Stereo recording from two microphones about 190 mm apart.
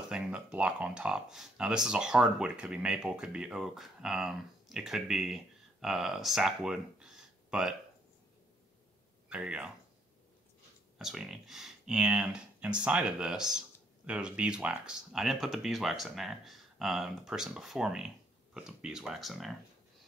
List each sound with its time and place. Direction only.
0.1 s speech: 5° right (ahead or behind)
9.3 s speech: 5° right (ahead or behind)
11.0 s speech: centre (ahead or behind)